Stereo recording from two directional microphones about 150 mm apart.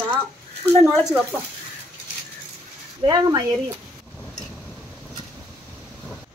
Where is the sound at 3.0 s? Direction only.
25° right (ahead or behind).